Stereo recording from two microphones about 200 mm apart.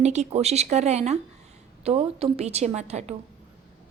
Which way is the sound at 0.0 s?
35° right (ahead or behind).